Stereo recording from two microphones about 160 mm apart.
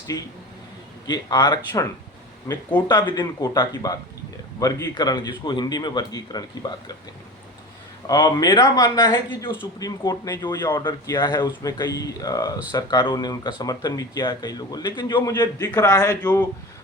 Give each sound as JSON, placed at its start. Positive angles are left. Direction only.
{"t": 0.1, "sound": "speech", "side_deg": 20}
{"t": 8.0, "sound": "speech", "side_deg": 25}